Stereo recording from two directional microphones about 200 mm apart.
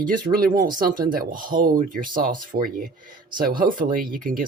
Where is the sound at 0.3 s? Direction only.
45° right (ahead or behind).